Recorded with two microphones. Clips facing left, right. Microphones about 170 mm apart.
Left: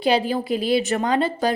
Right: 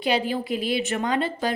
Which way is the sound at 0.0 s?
35° left (ahead or behind).